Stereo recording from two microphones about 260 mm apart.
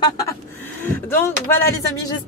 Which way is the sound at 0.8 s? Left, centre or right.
Centre.